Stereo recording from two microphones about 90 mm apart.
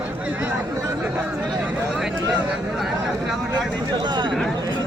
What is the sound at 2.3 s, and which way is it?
Vehicle, 5° right (ahead or behind).